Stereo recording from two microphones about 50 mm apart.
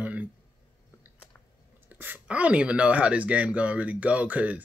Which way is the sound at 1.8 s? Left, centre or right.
Right.